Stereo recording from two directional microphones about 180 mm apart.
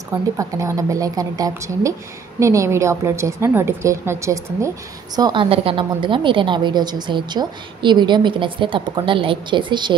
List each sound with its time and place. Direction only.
0.4 s a woman's voice: 15° right (ahead or behind)